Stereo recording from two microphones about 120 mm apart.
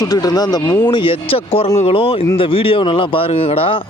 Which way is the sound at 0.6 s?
20° left (ahead or behind).